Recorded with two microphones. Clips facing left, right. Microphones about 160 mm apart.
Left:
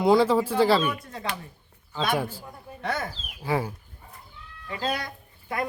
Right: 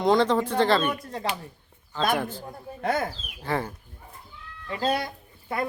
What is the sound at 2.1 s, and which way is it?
Speech, 10° left (ahead or behind).